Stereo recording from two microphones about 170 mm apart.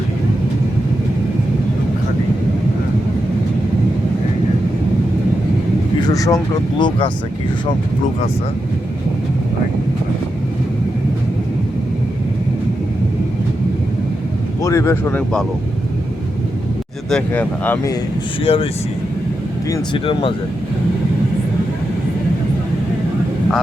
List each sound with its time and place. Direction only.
6.0 s speech: 20° left (ahead or behind)
14.6 s speech: 15° left (ahead or behind)
17.1 s speech: 5° left (ahead or behind)
18.4 s speech: 35° left (ahead or behind)
19.7 s speech: 30° left (ahead or behind)